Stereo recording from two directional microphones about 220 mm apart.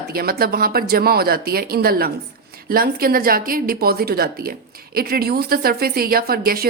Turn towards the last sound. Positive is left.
turn(degrees=-40)  # may be behind; listen again after turning